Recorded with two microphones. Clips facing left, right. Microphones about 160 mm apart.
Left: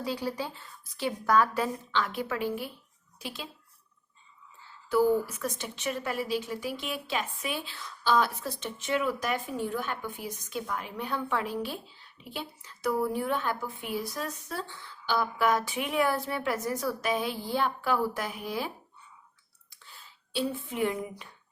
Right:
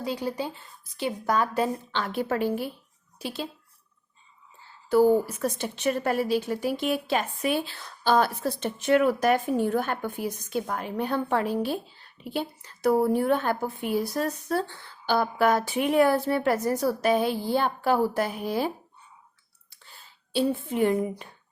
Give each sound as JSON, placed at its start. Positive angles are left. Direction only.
{"t": 0.0, "sound": "a woman's voice", "side_deg": -20}
{"t": 4.9, "sound": "a woman's voice", "side_deg": -30}
{"t": 5.6, "sound": "a woman's voice", "side_deg": -45}
{"t": 8.8, "sound": "a woman's voice", "side_deg": -55}
{"t": 10.5, "sound": "a woman's voice", "side_deg": -45}
{"t": 12.8, "sound": "a woman's voice", "side_deg": -35}
{"t": 13.1, "sound": "a woman's voice", "side_deg": -50}
{"t": 16.3, "sound": "a woman's voice", "side_deg": -45}
{"t": 19.8, "sound": "whispering", "side_deg": -40}
{"t": 20.7, "sound": "a woman's voice", "side_deg": -40}